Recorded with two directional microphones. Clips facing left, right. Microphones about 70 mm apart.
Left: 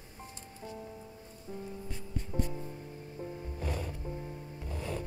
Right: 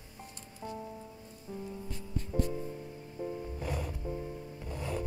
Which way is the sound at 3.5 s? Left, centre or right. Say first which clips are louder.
Right 1 dB; centre.